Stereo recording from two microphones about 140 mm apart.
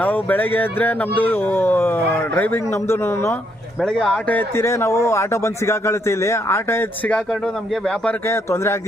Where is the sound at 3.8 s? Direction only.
5° left (ahead or behind).